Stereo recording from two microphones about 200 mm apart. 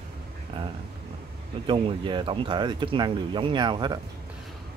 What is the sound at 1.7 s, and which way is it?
Speech, 25° right (ahead or behind).